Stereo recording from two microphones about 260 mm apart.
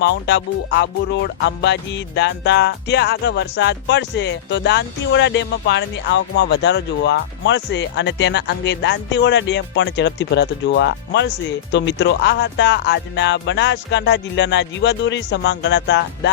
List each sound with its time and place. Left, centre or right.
0.0 s music: left